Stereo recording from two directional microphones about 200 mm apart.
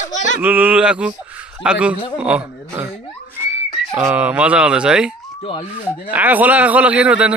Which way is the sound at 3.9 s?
15° right (ahead or behind).